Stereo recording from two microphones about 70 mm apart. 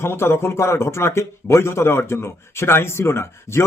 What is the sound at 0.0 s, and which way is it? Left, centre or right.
A man's voice, left.